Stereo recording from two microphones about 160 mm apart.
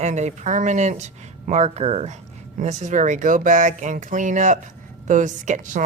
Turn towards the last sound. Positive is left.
turn(degrees=-50)  # may be behind; listen again after turning